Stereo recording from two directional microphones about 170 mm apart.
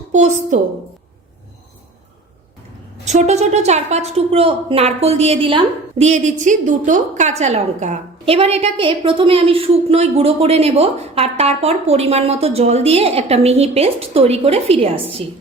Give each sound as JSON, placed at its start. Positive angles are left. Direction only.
{"t": 0.1, "sound": "a woman's voice", "side_deg": -45}
{"t": 3.0, "sound": "a woman's voice", "side_deg": -40}